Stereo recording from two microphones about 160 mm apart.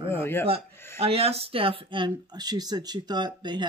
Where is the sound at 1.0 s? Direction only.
40° right (ahead or behind).